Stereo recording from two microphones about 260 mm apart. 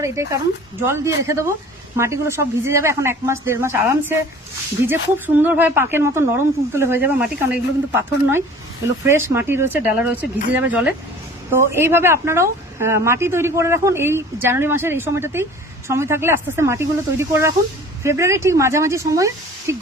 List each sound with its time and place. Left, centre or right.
0.0 s speech: centre